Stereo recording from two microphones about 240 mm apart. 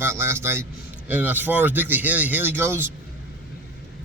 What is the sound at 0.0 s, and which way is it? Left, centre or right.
A man's voice, centre.